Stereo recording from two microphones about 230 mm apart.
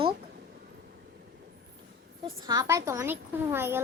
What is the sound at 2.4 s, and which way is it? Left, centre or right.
A child's voice, centre.